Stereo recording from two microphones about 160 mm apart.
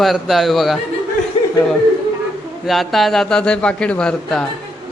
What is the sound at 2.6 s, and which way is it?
Speech, centre (ahead or behind).